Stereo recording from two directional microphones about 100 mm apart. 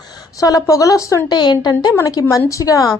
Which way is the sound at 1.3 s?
45° left (ahead or behind).